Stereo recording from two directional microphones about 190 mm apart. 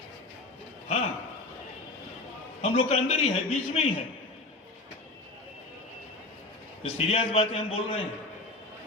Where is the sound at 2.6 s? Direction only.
35° left (ahead or behind).